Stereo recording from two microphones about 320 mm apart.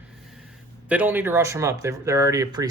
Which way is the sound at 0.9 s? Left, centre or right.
Centre.